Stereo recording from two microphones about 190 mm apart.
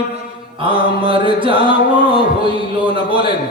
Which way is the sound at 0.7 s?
25° right (ahead or behind).